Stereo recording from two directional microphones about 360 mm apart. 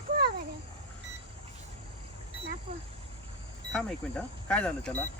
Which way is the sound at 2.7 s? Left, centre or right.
Centre.